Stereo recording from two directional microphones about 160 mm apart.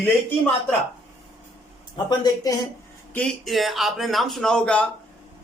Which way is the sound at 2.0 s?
25° left (ahead or behind).